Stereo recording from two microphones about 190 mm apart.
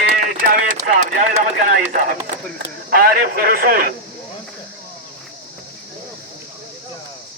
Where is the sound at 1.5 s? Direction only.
45° right (ahead or behind).